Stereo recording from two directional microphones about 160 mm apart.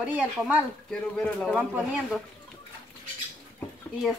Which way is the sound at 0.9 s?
5° left (ahead or behind).